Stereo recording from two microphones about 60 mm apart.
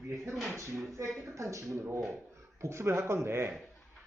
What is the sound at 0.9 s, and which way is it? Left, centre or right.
Speech, right.